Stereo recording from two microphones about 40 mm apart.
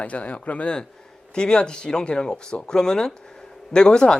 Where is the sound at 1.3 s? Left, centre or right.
Left.